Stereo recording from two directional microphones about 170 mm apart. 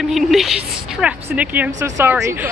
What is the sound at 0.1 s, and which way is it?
A woman's voice, centre (ahead or behind).